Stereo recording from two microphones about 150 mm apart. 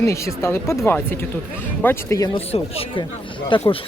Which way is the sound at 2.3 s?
40° left (ahead or behind).